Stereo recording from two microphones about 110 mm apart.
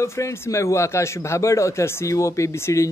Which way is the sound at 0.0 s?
25° left (ahead or behind).